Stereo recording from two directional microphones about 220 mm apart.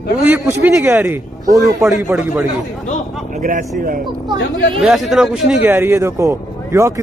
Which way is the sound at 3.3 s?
35° right (ahead or behind).